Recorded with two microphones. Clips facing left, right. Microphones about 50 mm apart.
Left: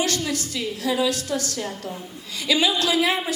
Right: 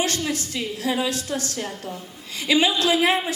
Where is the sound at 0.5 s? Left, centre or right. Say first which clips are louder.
Left 2 dB; right.